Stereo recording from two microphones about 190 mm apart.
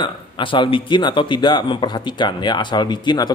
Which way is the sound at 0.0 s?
25° left (ahead or behind).